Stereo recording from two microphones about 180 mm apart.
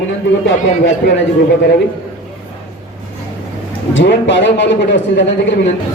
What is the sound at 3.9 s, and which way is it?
Speech, 85° left.